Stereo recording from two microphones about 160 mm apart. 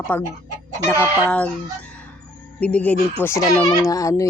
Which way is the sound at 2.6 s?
10° left (ahead or behind).